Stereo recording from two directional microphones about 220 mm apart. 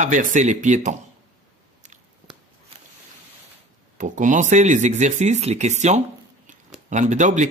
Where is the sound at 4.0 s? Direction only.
35° right (ahead or behind).